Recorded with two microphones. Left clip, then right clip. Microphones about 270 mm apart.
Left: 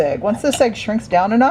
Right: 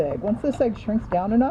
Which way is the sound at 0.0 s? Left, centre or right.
Left.